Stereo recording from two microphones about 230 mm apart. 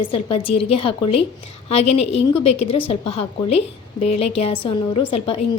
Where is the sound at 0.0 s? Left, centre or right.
Left.